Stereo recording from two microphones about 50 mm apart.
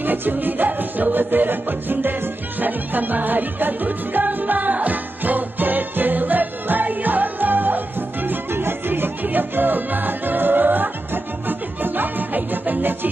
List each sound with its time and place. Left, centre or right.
0.0 s music: right